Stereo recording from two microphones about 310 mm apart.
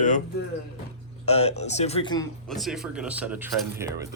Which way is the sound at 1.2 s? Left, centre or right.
Centre.